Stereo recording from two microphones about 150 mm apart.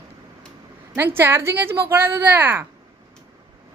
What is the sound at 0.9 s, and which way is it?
Speech, 15° right (ahead or behind).